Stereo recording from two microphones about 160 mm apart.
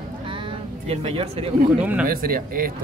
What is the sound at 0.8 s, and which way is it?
Speech, 40° right (ahead or behind).